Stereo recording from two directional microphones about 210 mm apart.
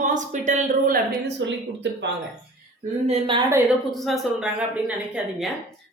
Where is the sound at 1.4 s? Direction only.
60° right (ahead or behind).